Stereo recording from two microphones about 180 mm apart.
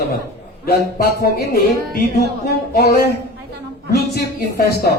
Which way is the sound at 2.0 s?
60° left (ahead or behind).